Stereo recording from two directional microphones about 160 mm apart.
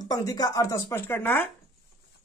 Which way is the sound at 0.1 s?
25° left (ahead or behind).